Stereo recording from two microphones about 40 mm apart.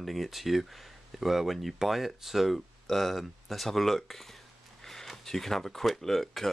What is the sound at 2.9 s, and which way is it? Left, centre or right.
Speech, centre.